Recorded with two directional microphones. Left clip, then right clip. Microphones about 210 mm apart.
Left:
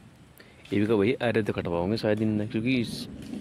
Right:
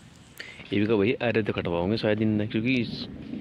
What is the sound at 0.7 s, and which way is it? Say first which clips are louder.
Speech: even; 10° left (ahead or behind).